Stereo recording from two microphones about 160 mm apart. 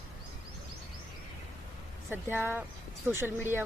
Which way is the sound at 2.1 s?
15° right (ahead or behind).